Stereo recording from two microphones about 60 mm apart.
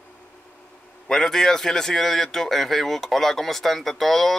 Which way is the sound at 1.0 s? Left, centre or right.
Centre.